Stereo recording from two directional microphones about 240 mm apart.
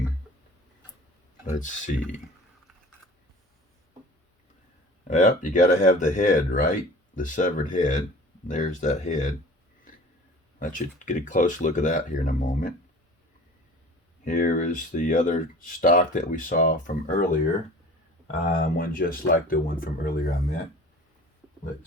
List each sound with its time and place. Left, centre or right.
1.5 s speech: left
5.0 s speech: left
10.6 s speech: left
14.3 s speech: left